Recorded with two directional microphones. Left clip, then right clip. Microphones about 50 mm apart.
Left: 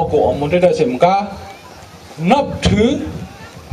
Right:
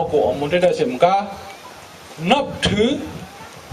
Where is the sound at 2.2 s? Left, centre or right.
Right.